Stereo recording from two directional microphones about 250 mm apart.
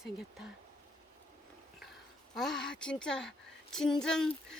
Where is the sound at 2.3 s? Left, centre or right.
Centre.